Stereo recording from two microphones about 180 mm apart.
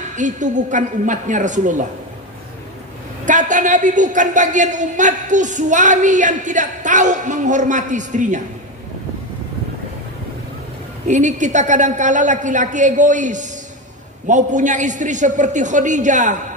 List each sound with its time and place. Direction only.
0.1 s a woman's voice: 45° right (ahead or behind)
3.3 s a woman's voice: 45° right (ahead or behind)
11.1 s a woman's voice: 45° right (ahead or behind)